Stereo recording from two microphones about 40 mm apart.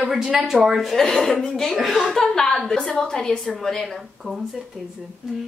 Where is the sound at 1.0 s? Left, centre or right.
Centre.